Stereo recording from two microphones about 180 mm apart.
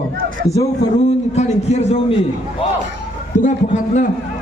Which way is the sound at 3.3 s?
45° left (ahead or behind).